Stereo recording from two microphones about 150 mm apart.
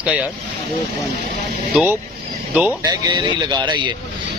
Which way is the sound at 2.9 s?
30° right (ahead or behind).